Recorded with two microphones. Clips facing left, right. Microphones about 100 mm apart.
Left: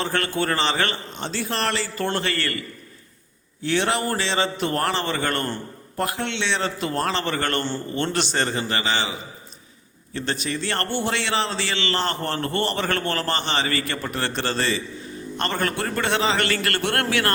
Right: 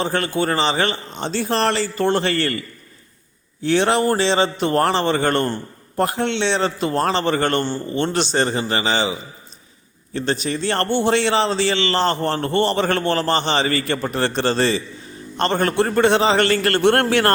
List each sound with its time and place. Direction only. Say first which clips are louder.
0.0 s a man's voice: right 4 dB; 20° right (ahead or behind)
3.7 s a man's voice: right 6 dB; 25° right (ahead or behind)
10.2 s a man's voice: right 5 dB; 25° right (ahead or behind)